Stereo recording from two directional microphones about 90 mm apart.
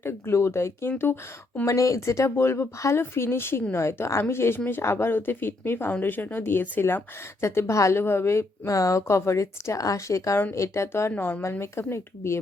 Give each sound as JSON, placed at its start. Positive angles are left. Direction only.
{"t": 0.0, "sound": "a woman's voice", "side_deg": 30}
{"t": 1.6, "sound": "a woman's voice", "side_deg": 35}
{"t": 11.1, "sound": "a woman's voice", "side_deg": 20}